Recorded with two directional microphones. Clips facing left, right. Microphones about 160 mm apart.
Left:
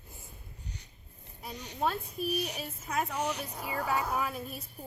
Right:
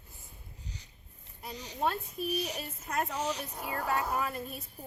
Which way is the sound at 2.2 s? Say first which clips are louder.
Left 1 dB; 60° left (ahead or behind).